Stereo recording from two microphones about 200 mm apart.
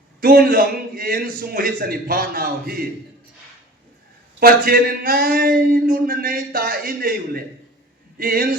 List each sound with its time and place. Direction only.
0.2 s speech: 45° right (ahead or behind)
4.4 s speech: 45° right (ahead or behind)